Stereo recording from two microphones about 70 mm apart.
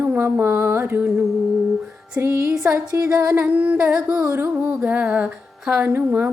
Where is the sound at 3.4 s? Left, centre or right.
Right.